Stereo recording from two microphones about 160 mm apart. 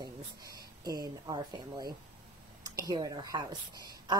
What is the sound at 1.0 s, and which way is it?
A woman's voice, 25° right (ahead or behind).